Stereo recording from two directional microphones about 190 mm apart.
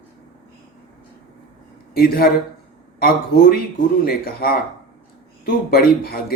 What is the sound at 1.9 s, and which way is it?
Speech, 50° left (ahead or behind).